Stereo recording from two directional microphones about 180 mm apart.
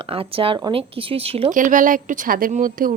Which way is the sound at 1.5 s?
45° right (ahead or behind).